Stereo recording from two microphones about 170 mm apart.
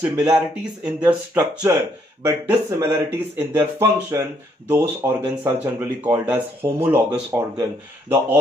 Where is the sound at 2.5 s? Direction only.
15° right (ahead or behind).